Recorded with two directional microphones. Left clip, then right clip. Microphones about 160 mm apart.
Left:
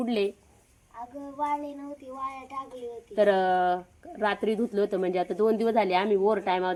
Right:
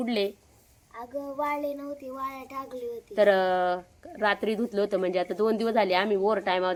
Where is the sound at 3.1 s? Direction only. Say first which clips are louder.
Right 1 dB; 10° left (ahead or behind).